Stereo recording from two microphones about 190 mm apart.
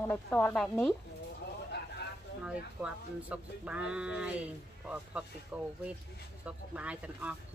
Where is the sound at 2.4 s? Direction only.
5° right (ahead or behind).